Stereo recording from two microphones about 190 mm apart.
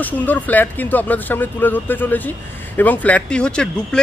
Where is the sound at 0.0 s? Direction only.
10° left (ahead or behind).